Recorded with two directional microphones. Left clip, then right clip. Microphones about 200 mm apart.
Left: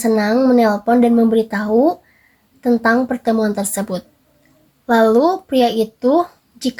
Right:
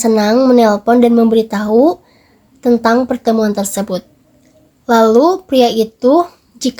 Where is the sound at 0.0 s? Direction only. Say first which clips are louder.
Right 4 dB; 25° right (ahead or behind).